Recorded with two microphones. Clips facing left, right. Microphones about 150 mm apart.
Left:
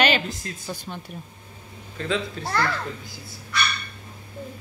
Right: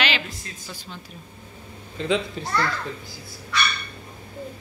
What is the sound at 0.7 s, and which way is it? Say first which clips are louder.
Speech: left 6 dB; 55° left (ahead or behind).